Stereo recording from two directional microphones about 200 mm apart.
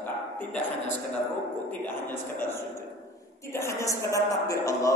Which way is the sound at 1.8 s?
10° left (ahead or behind).